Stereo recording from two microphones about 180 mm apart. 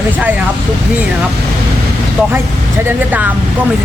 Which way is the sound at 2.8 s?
10° right (ahead or behind).